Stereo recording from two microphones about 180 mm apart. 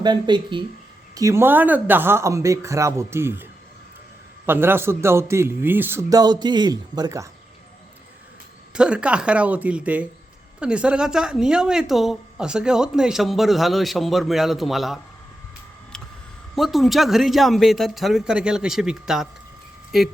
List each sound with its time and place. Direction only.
0.0 s a man's voice: 25° right (ahead or behind)
4.4 s a man's voice: 10° right (ahead or behind)
8.7 s a man's voice: 5° right (ahead or behind)
16.6 s a woman's voice: centre (ahead or behind)